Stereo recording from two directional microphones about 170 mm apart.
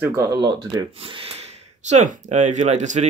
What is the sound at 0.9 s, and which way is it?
Speech, 35° right (ahead or behind).